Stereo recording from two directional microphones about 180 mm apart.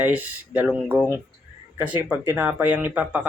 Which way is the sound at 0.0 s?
10° right (ahead or behind).